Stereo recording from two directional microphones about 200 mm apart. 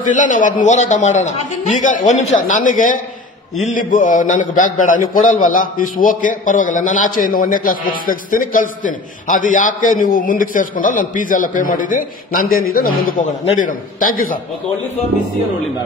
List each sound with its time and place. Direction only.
0.1 s a man's voice: 40° left (ahead or behind)